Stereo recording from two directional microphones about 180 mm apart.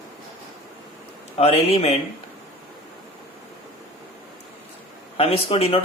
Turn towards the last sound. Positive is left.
turn(degrees=35)  # may be behind; listen again after turning